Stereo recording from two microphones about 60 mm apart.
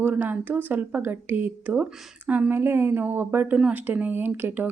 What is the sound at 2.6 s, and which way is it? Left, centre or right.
Speech, right.